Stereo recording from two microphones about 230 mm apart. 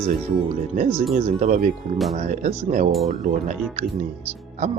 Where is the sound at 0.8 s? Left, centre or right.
Right.